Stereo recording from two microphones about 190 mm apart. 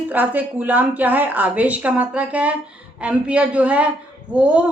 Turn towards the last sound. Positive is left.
turn(degrees=-5)  # may be behind; listen again after turning